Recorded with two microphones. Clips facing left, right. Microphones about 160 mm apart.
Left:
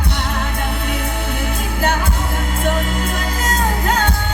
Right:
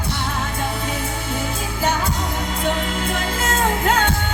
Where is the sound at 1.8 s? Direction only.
55° left (ahead or behind).